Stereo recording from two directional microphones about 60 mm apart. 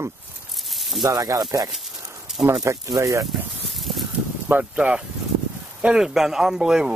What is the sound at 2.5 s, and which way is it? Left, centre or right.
Speech, right.